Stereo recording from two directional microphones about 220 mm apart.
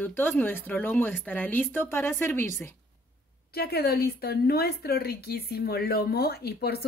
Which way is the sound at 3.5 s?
45° left (ahead or behind).